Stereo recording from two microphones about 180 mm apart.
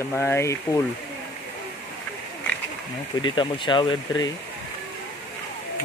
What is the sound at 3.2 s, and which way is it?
Speech, 25° left (ahead or behind).